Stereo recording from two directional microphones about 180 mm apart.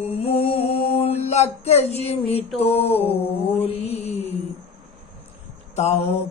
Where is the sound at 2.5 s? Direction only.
35° left (ahead or behind).